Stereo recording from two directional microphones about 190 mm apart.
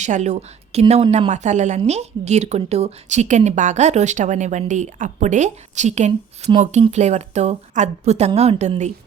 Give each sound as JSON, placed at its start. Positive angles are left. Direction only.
{"t": 0.0, "sound": "a woman's voice", "side_deg": -40}